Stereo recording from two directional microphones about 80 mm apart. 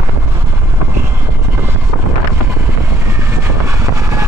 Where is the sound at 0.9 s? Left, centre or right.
Right.